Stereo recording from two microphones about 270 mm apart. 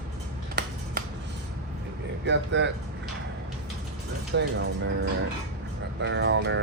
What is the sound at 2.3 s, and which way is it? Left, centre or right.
Speech, right.